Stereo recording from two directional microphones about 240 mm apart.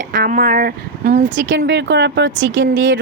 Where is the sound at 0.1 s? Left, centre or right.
Right.